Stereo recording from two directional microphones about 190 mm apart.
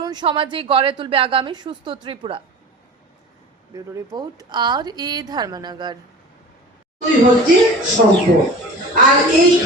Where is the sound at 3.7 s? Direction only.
20° right (ahead or behind).